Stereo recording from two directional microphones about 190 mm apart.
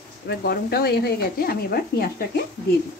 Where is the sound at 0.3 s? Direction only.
55° left (ahead or behind).